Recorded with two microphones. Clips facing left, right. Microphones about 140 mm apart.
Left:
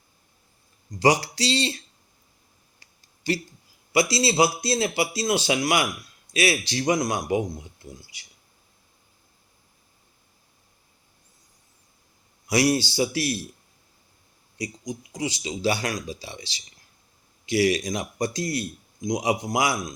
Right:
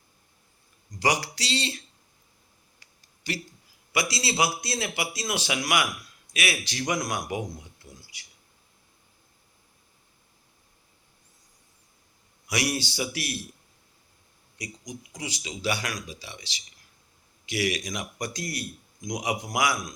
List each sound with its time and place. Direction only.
0.9 s speech: 30° left (ahead or behind)
2.8 s a sound: 30° left (ahead or behind)
3.9 s speech: 30° left (ahead or behind)
12.5 s speech: 30° left (ahead or behind)
14.6 s speech: 25° left (ahead or behind)